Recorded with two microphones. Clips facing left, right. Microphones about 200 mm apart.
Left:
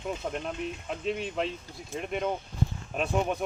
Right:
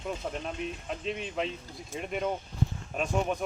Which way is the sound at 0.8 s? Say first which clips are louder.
Left 3 dB; centre (ahead or behind).